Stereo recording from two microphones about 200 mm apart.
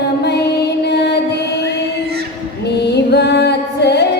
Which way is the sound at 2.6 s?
55° left (ahead or behind).